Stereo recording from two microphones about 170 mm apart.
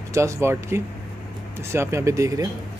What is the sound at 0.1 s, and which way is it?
Speech, 15° right (ahead or behind).